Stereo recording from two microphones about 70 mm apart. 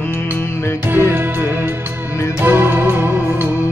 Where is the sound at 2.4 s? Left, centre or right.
Right.